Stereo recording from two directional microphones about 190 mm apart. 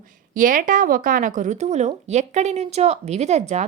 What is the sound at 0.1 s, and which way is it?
A woman's voice, 45° right (ahead or behind).